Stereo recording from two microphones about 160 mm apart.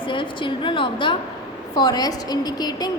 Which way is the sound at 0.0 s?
30° left (ahead or behind).